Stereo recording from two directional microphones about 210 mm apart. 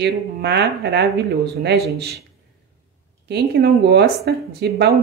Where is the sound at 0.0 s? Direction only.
50° right (ahead or behind).